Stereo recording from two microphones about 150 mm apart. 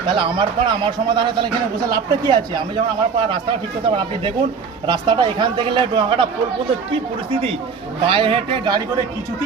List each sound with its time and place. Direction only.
0.1 s a man's voice: 35° right (ahead or behind)
8.0 s a man's voice: 35° right (ahead or behind)